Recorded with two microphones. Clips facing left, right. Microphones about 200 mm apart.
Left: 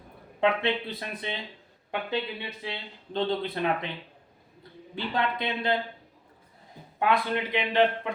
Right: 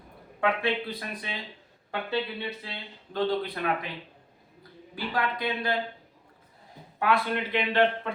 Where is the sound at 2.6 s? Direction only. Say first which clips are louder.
Left 4 dB; 20° left (ahead or behind).